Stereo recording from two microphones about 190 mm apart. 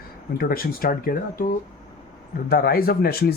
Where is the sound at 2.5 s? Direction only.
50° left (ahead or behind).